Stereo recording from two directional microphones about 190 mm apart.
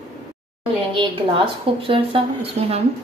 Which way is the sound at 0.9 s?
30° right (ahead or behind).